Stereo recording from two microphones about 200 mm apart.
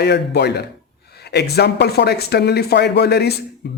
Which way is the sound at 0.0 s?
55° left (ahead or behind).